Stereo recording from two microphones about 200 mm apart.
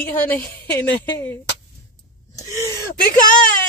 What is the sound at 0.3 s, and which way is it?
Speech, 10° left (ahead or behind).